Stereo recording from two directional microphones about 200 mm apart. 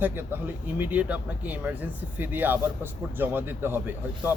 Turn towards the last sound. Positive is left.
turn(degrees=-10)  # may be behind; listen again after turning